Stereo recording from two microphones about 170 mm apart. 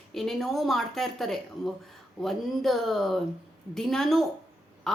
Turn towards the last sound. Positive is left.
turn(degrees=0)  # may be behind; listen again after turning